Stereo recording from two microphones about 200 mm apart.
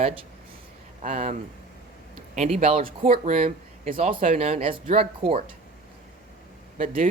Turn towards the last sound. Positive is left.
turn(degrees=-40)  # may be behind; listen again after turning